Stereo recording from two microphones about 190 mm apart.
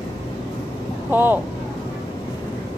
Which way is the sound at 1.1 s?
10° right (ahead or behind).